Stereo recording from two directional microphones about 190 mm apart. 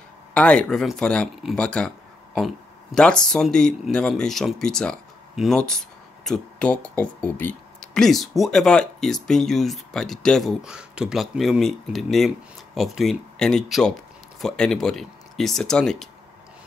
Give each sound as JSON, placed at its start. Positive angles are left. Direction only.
{"t": 0.3, "sound": "speech", "side_deg": 5}